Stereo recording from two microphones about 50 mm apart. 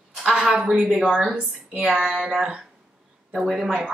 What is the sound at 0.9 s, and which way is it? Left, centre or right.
Speech, centre.